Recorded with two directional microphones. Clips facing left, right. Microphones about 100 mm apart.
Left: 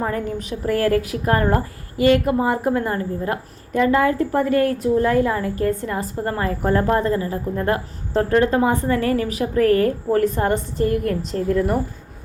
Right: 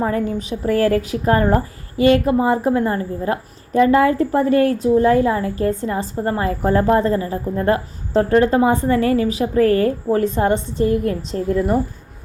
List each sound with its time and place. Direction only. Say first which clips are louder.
0.1 s a woman's voice: right 4 dB; 25° right (ahead or behind)